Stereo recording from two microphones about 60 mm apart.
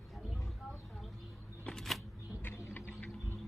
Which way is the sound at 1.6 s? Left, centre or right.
Centre.